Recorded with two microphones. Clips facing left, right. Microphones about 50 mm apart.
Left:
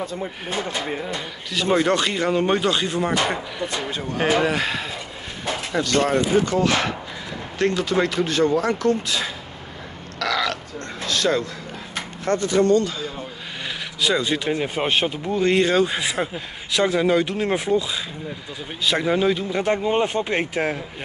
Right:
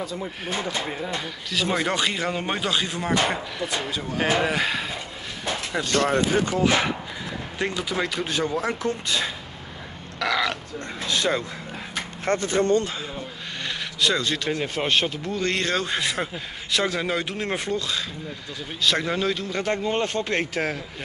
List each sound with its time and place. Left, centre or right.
0.0 s speech: left
1.5 s speech: centre
6.0 s speech: right
6.5 s speech: centre
7.7 s speech: centre
10.1 s burping: centre
11.1 s speech: centre
12.3 s speech: right
14.0 s speech: centre